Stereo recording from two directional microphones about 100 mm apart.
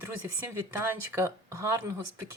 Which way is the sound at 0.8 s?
30° right (ahead or behind).